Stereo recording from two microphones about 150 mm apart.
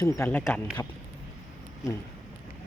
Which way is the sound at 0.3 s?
10° left (ahead or behind).